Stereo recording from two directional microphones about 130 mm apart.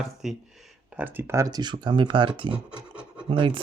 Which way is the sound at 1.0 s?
15° right (ahead or behind).